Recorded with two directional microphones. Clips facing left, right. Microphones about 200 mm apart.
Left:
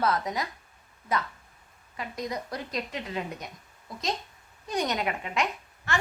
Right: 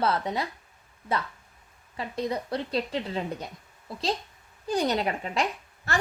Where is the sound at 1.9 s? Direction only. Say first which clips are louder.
Right 4 dB; 30° right (ahead or behind).